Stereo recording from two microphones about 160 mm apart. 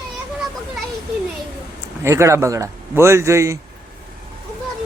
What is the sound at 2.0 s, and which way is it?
A man's voice, 20° right (ahead or behind).